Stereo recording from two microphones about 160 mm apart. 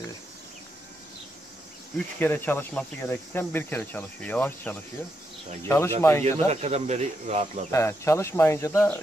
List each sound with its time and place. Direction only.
2.1 s speech: 10° left (ahead or behind)
6.5 s speech: 40° right (ahead or behind)
7.7 s speech: 20° left (ahead or behind)